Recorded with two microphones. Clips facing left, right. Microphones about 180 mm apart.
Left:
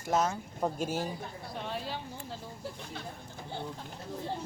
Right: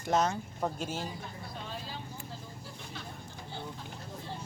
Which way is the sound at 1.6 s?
65° left (ahead or behind).